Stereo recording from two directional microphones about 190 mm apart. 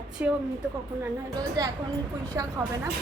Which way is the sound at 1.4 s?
20° right (ahead or behind).